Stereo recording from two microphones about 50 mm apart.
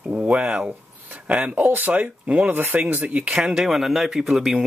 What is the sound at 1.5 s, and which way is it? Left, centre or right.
Speech, right.